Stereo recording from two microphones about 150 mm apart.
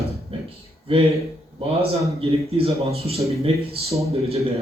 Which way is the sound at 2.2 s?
40° right (ahead or behind).